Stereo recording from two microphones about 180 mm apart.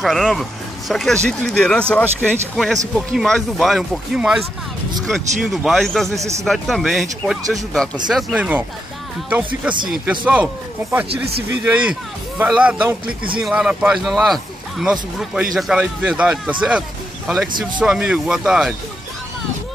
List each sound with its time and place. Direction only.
0.0 s speech: centre (ahead or behind)
6.1 s speech: 15° right (ahead or behind)
6.4 s speech: centre (ahead or behind)